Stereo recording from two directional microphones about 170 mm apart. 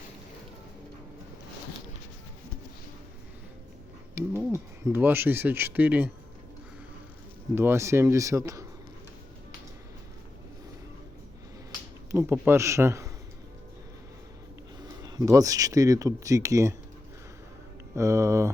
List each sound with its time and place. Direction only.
4.1 s speech: 15° right (ahead or behind)
7.5 s speech: 15° right (ahead or behind)
12.1 s speech: 15° right (ahead or behind)
14.8 s speech: 25° right (ahead or behind)
17.9 s speech: 15° right (ahead or behind)